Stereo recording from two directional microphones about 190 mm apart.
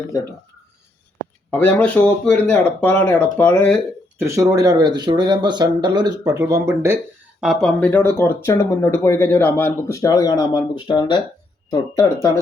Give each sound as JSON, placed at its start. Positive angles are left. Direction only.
{"t": 1.5, "sound": "speech", "side_deg": 10}
{"t": 4.2, "sound": "speech", "side_deg": -15}
{"t": 7.4, "sound": "speech", "side_deg": 0}